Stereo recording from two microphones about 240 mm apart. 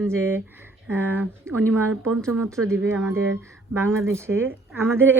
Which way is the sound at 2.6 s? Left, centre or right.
Centre.